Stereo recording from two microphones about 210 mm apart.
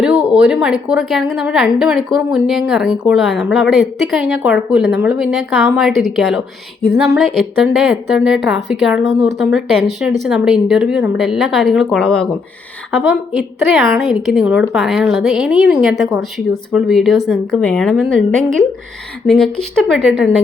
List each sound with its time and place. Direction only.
0.0 s a woman's voice: 5° right (ahead or behind)